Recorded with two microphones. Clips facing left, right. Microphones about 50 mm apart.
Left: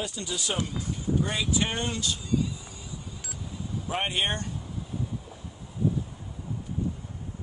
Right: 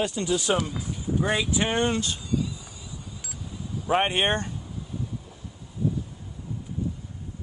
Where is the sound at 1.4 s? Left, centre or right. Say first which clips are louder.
Right 4 dB; centre.